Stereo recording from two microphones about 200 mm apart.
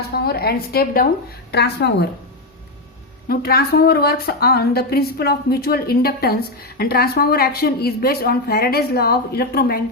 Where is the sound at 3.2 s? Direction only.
50° left (ahead or behind).